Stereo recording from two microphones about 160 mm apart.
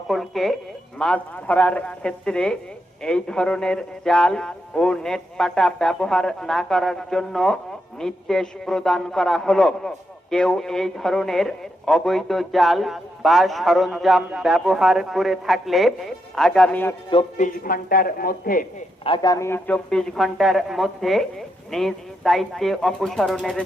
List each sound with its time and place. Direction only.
0.1 s a sound: centre (ahead or behind)
0.9 s speech: 5° left (ahead or behind)
17.3 s speech: 60° left (ahead or behind)
19.0 s speech: 30° left (ahead or behind); by 23.6 s centre (ahead or behind)